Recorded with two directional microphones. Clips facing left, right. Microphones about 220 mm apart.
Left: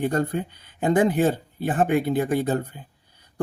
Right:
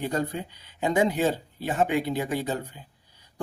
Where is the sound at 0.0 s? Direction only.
50° left (ahead or behind).